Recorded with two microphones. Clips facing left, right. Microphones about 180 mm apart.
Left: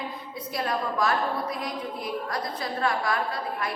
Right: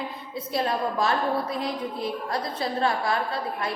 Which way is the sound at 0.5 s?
25° right (ahead or behind).